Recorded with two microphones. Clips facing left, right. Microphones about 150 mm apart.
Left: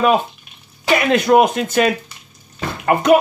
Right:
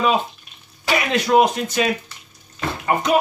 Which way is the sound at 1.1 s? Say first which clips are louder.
Left 3 dB; 50° left (ahead or behind).